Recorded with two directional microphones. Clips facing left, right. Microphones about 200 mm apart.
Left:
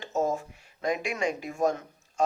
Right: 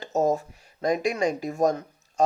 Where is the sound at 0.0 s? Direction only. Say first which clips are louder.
Right 4 dB; 40° right (ahead or behind).